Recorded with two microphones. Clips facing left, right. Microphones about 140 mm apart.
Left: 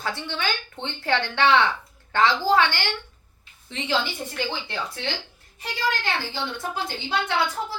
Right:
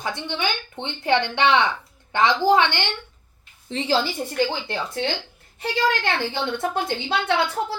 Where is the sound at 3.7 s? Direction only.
35° right (ahead or behind).